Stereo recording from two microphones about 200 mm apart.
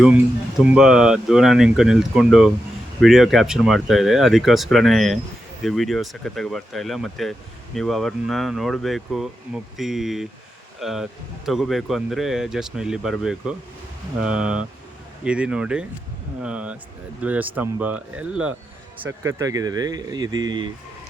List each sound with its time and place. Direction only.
0.6 s speech: 5° right (ahead or behind)
19.4 s speech: 15° right (ahead or behind)